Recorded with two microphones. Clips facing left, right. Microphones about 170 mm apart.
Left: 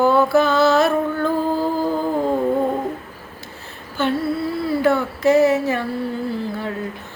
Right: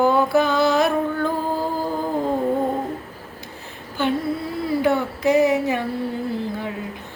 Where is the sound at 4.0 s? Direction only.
15° right (ahead or behind).